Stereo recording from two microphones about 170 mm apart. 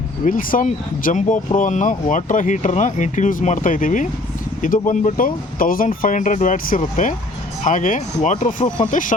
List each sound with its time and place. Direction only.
0.3 s speech: 50° left (ahead or behind)